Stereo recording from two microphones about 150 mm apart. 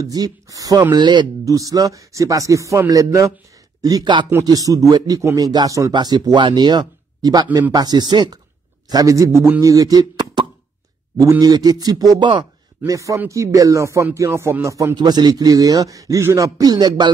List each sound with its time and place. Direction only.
0.0 s a man's voice: 25° right (ahead or behind)
4.3 s a man's voice: 20° right (ahead or behind)